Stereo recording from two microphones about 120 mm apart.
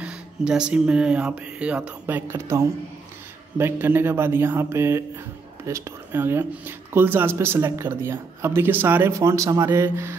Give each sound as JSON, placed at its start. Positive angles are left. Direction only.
{"t": 0.0, "sound": "speech", "side_deg": -10}